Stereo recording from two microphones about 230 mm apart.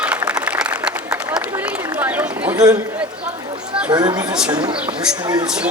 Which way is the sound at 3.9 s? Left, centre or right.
Centre.